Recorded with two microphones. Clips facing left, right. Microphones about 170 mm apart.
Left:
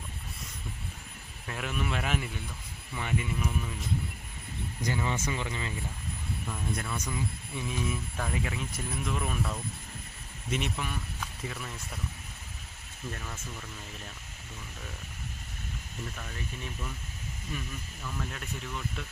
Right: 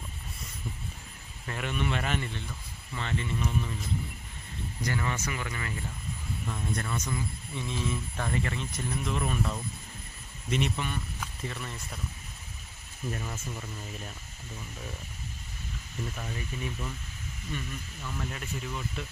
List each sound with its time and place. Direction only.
1.5 s speech: centre (ahead or behind)
4.8 s speech: 20° left (ahead or behind)
6.5 s speech: 5° left (ahead or behind)
13.1 s speech: 15° right (ahead or behind)
18.0 s speech: centre (ahead or behind)